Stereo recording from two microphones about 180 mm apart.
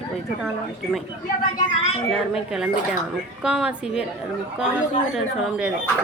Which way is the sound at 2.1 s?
5° right (ahead or behind).